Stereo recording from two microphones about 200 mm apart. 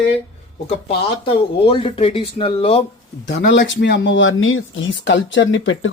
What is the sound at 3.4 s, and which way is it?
Speech, 60° left (ahead or behind).